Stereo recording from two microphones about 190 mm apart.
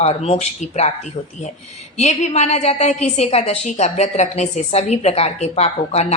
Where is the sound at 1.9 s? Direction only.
35° left (ahead or behind).